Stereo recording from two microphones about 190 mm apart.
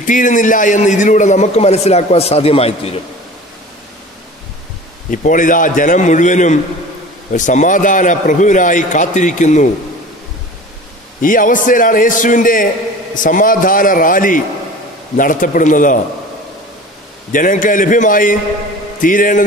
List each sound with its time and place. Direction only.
0.0 s a man's voice: 45° left (ahead or behind)
5.1 s a man's voice: 45° left (ahead or behind)
11.1 s a man's voice: 45° left (ahead or behind)
17.3 s a man's voice: 45° left (ahead or behind)